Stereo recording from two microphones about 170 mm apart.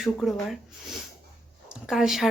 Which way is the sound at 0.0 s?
Centre (ahead or behind).